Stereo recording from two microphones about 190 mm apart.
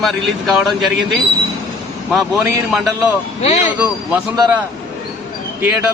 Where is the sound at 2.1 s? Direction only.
10° right (ahead or behind).